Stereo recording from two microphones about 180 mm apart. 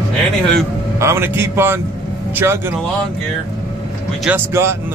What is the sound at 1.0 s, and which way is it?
Speech, 15° right (ahead or behind).